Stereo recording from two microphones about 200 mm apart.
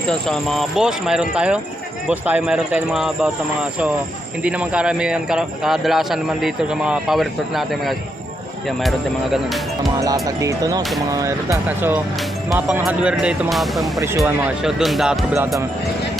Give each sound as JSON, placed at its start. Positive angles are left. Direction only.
{"t": 0.1, "sound": "speech", "side_deg": 0}
{"t": 9.3, "sound": "speech", "side_deg": 0}
{"t": 10.2, "sound": "speech", "side_deg": -15}